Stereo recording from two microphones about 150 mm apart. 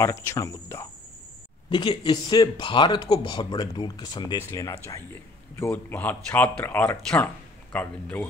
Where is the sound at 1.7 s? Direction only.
30° left (ahead or behind).